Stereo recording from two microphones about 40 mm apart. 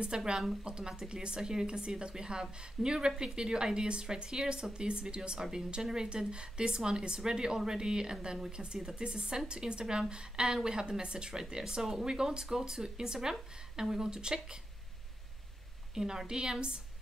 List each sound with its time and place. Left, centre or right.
0.0 s a woman's voice: right
15.9 s speech: centre